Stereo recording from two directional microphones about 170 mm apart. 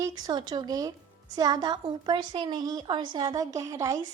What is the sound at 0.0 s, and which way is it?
A woman's voice, 20° right (ahead or behind).